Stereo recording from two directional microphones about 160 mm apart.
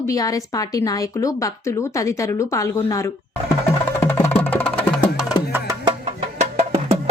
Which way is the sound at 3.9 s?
15° left (ahead or behind).